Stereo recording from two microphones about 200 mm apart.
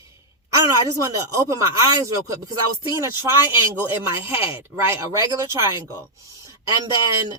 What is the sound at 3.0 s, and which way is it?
Speech, 15° right (ahead or behind).